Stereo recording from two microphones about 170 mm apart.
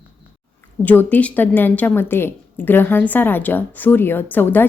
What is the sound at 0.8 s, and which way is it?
Speech, 10° left (ahead or behind).